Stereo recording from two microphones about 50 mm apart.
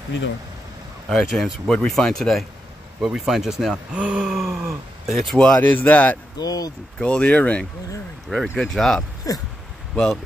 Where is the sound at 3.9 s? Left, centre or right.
Right.